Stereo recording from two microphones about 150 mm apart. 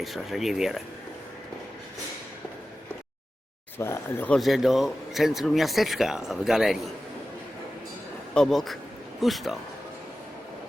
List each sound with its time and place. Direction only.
0.0 s speech: centre (ahead or behind)
3.8 s speech: 15° left (ahead or behind)
4.4 s speech: centre (ahead or behind)
8.3 s speech: 5° left (ahead or behind)